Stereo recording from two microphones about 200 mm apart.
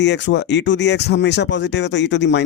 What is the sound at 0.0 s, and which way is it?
Speech, 60° left (ahead or behind).